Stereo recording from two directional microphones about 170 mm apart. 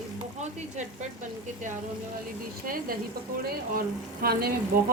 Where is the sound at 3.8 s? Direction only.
65° right (ahead or behind).